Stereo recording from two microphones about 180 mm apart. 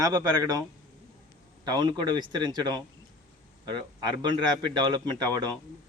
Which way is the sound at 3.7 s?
25° right (ahead or behind).